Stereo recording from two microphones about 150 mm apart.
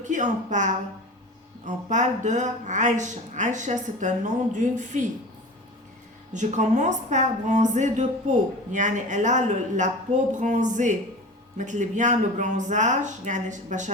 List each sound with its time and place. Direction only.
0.0 s a woman's voice: 55° right (ahead or behind)
6.3 s a woman's voice: 55° right (ahead or behind)